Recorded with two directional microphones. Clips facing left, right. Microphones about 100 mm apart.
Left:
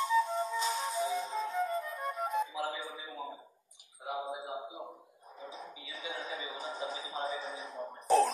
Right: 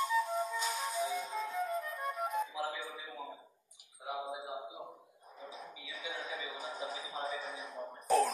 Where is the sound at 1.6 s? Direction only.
Centre (ahead or behind).